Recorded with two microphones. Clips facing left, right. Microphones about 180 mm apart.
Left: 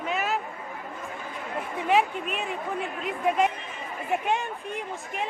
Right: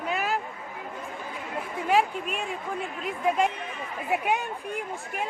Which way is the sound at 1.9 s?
Centre (ahead or behind).